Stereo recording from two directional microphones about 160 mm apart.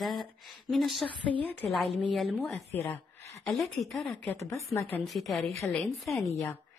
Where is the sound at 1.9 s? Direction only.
Centre (ahead or behind).